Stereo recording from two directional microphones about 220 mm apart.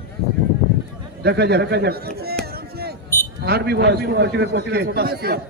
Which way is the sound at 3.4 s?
45° right (ahead or behind).